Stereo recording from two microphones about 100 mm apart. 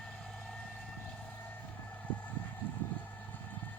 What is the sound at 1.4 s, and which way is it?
Vehicle, 15° left (ahead or behind).